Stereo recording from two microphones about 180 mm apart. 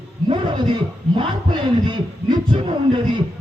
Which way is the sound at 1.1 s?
25° right (ahead or behind).